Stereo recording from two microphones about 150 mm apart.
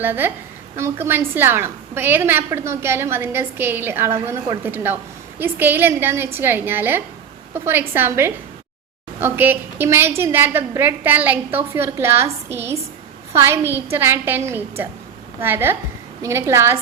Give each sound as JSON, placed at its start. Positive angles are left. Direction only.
{"t": 0.0, "sound": "a woman's voice", "side_deg": -15}